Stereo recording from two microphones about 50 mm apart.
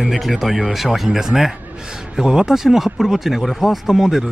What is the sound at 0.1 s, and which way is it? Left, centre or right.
Speech, centre.